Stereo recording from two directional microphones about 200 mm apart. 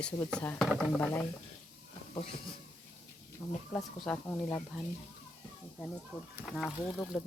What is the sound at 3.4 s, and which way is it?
Speech, 15° left (ahead or behind).